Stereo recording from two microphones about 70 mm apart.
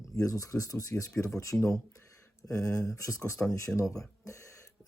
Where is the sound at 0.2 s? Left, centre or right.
Left.